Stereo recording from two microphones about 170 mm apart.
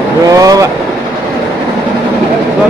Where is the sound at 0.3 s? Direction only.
20° right (ahead or behind).